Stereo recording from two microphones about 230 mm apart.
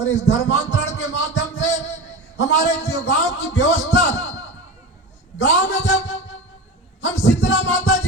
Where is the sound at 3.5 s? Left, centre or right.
Left.